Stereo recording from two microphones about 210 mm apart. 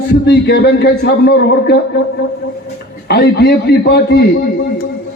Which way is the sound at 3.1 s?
50° left (ahead or behind).